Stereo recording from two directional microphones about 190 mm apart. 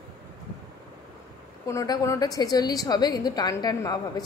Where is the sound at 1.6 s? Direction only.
15° left (ahead or behind).